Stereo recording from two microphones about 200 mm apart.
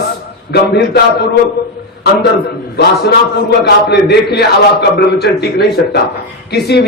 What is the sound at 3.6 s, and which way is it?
Speech, 60° left (ahead or behind).